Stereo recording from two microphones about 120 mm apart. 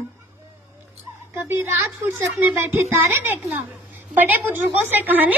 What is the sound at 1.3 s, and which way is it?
A woman's voice, 20° right (ahead or behind).